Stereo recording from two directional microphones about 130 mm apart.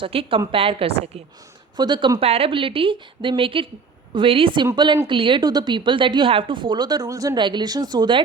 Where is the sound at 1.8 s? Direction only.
35° right (ahead or behind).